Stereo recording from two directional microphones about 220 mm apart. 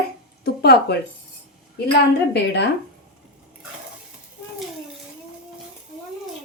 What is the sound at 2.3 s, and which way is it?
Speech, 50° left (ahead or behind).